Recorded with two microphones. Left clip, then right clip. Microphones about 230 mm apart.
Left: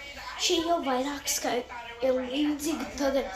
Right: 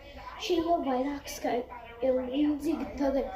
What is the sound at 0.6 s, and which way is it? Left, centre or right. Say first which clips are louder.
Speech: left 1 dB; left.